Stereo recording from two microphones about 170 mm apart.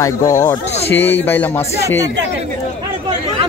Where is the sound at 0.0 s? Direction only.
20° left (ahead or behind).